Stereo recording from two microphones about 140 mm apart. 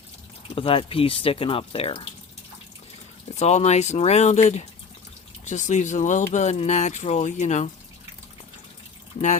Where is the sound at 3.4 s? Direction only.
50° left (ahead or behind).